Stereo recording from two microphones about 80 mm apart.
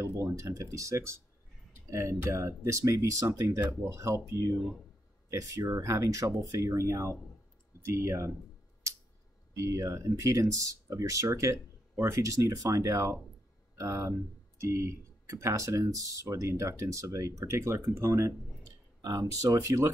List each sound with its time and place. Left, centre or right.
0.0 s speech: right
9.6 s speech: right